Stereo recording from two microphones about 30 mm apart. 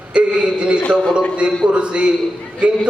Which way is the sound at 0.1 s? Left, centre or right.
Right.